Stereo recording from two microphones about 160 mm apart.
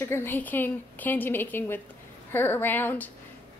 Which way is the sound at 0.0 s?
15° left (ahead or behind).